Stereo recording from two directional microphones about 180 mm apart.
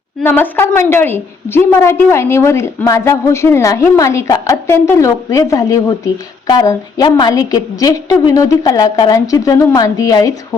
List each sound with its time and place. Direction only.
0.2 s a woman's voice: 10° left (ahead or behind)